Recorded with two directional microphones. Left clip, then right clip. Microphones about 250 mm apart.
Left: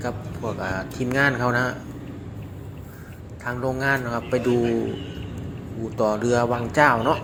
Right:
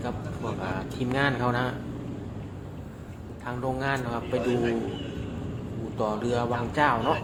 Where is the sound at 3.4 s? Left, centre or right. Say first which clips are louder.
Left 5 dB; centre.